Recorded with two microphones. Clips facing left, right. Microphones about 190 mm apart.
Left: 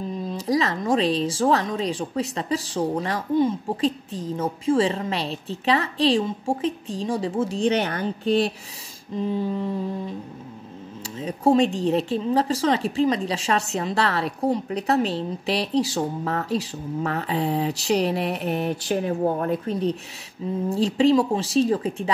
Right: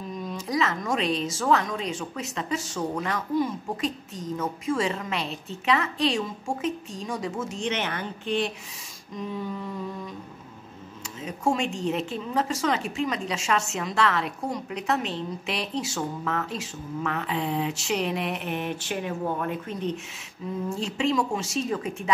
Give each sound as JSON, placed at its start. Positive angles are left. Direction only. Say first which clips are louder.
{"t": 0.1, "sound": "speech", "louder": "left 5 dB", "side_deg": 30}
{"t": 9.1, "sound": "humming", "louder": "left 7 dB", "side_deg": 30}
{"t": 11.1, "sound": "speech", "louder": "left 8 dB", "side_deg": 35}